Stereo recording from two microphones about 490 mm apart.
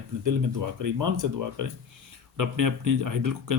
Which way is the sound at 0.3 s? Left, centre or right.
Right.